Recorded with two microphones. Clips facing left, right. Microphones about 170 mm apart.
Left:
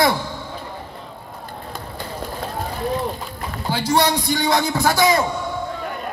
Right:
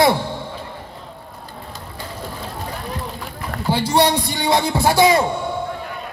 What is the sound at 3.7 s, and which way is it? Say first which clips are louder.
A man's voice: right 2 dB; 30° right (ahead or behind).